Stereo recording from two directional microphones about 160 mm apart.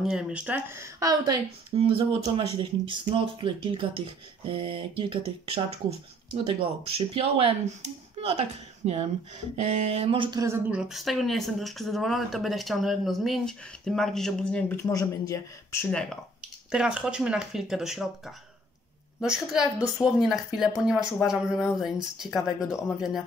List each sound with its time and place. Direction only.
0.0 s a woman's voice: 5° right (ahead or behind); by 10.4 s 30° right (ahead or behind)
10.7 s speech: 5° right (ahead or behind)
14.9 s speech: 20° left (ahead or behind)
16.7 s speech: 5° right (ahead or behind)